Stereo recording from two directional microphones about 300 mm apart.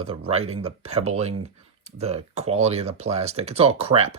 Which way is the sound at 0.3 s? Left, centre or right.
Centre.